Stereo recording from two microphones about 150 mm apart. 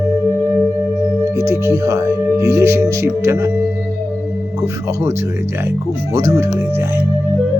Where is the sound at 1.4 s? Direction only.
20° right (ahead or behind).